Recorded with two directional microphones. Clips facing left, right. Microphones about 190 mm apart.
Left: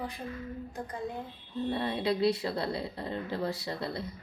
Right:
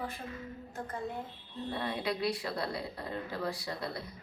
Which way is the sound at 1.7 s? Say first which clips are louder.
Left 4 dB; 25° left (ahead or behind).